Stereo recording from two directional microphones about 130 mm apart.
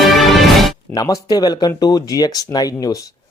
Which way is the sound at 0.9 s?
30° left (ahead or behind).